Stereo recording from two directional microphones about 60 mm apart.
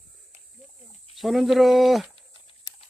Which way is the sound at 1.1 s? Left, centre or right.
Centre.